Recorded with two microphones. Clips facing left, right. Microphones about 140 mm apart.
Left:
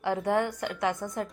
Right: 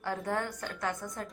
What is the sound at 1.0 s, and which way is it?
Speech, 30° left (ahead or behind).